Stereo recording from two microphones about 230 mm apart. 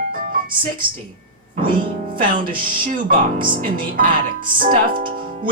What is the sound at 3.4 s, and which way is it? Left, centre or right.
Speech, right.